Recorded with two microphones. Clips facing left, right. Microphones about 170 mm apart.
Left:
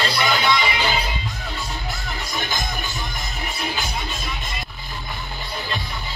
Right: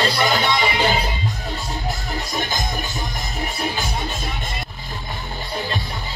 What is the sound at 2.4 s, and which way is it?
Music, 40° right (ahead or behind).